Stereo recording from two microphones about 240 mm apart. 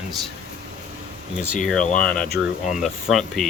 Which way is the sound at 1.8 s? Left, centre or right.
Left.